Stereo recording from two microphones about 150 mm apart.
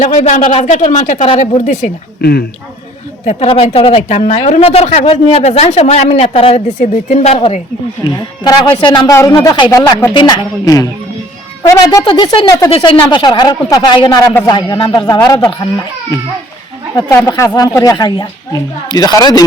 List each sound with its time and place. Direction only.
0.0 s a woman's voice: 55° left (ahead or behind)
3.2 s a woman's voice: 40° left (ahead or behind)
8.0 s speech: 30° left (ahead or behind)
15.2 s speech: 15° left (ahead or behind)
16.9 s speech: 20° left (ahead or behind)